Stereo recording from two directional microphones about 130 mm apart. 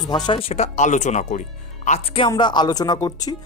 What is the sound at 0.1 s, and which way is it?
Speech, 30° left (ahead or behind).